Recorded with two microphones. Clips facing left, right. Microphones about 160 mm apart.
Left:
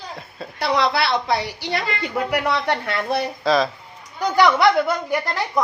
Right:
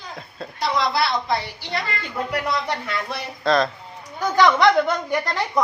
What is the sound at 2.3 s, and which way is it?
Speech, 70° left (ahead or behind).